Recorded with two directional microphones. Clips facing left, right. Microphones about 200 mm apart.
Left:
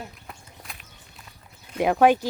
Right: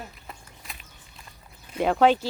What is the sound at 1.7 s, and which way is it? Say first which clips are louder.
Speech: left 2 dB; 10° left (ahead or behind).